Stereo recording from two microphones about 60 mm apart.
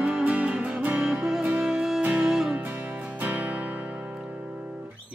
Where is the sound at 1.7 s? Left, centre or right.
Centre.